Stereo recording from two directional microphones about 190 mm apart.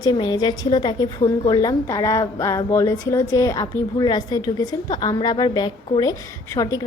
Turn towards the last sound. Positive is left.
turn(degrees=20)  # may be behind; listen again after turning